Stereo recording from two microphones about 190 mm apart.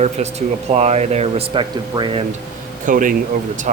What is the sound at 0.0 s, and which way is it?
Speech, 35° right (ahead or behind).